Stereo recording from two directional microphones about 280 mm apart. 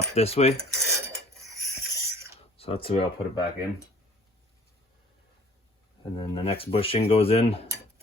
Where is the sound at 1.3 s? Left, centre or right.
Centre.